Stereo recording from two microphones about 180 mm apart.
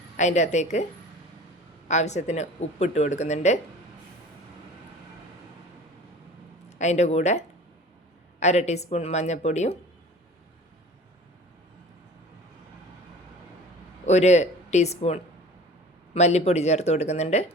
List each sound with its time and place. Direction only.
0.2 s speech: 40° left (ahead or behind)
1.9 s speech: 40° left (ahead or behind)
6.7 s speech: 40° left (ahead or behind)
14.0 s speech: 40° left (ahead or behind)